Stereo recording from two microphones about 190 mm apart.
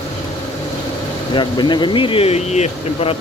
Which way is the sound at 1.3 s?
25° left (ahead or behind).